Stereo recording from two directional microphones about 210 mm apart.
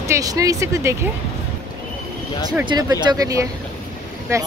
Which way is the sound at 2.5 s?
20° right (ahead or behind).